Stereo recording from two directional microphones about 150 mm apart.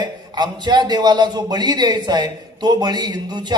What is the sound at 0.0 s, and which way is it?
A man's voice, 30° right (ahead or behind).